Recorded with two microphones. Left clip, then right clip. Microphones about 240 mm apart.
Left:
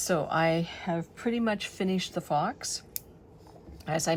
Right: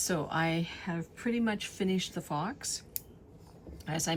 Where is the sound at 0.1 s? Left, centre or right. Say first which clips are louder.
Left 7 dB; centre.